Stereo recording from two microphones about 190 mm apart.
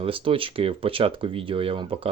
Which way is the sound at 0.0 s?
30° right (ahead or behind).